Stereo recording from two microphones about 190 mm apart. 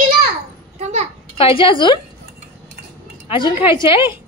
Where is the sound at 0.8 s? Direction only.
35° right (ahead or behind).